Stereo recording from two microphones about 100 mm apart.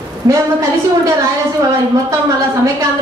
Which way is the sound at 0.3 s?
30° right (ahead or behind).